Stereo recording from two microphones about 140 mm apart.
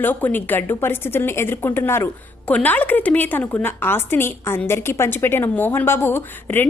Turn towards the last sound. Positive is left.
turn(degrees=15)  # may be behind; listen again after turning